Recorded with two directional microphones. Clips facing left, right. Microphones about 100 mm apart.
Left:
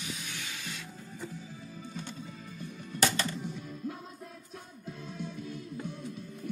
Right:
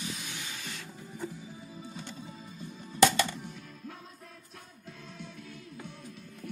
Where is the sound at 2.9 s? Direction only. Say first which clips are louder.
Right 6 dB; centre (ahead or behind).